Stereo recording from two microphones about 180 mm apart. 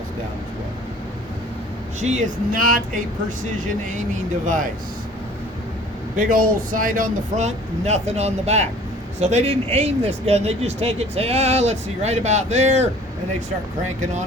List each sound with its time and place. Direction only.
2.0 s speech: 40° right (ahead or behind)
4.4 s speech: 45° right (ahead or behind)
6.1 s speech: 50° right (ahead or behind)